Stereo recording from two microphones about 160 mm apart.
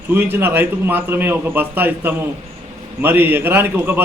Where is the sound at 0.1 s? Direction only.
15° right (ahead or behind).